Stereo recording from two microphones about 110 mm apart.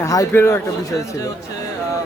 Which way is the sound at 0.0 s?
30° left (ahead or behind).